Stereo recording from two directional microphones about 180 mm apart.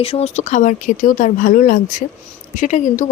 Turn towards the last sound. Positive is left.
turn(degrees=40)  # may be behind; listen again after turning